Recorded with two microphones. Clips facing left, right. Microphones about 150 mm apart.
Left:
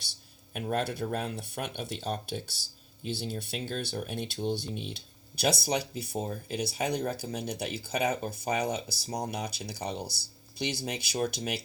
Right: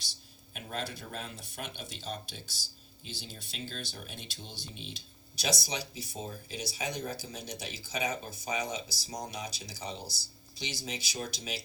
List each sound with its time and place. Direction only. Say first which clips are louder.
0.5 s speech: left 8 dB; 60° left (ahead or behind)